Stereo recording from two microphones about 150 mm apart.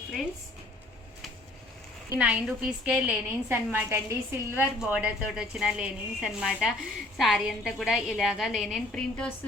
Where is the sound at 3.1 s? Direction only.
15° right (ahead or behind).